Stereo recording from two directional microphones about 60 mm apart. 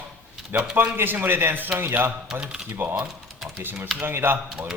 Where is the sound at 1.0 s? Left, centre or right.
Right.